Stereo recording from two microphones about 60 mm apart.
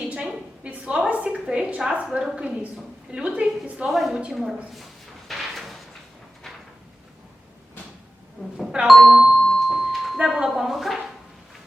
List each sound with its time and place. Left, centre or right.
0.2 s a sound: centre
2.1 s a woman's voice: centre
3.8 s speech: centre
5.3 s a sound: centre
8.9 s speech: centre
9.3 s music: centre
10.2 s speech: centre